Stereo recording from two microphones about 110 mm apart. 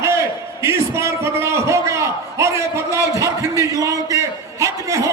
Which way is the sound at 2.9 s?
25° left (ahead or behind).